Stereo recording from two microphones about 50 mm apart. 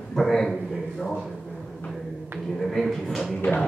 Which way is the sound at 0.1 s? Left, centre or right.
Centre.